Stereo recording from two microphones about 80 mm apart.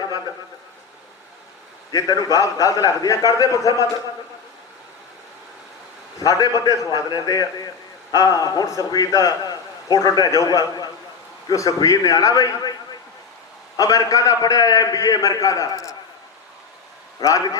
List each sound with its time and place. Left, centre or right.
1.9 s a man's voice: left
6.1 s a man's voice: left
13.7 s a man's voice: left
17.2 s a man's voice: left